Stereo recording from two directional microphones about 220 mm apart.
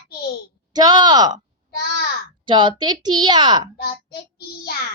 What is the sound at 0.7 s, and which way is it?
Speech, 20° right (ahead or behind).